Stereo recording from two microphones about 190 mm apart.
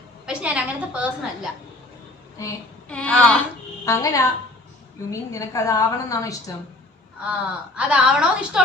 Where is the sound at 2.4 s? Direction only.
15° left (ahead or behind).